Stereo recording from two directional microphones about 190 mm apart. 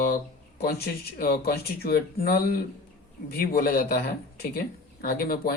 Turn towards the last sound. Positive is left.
turn(degrees=50)  # may be behind; listen again after turning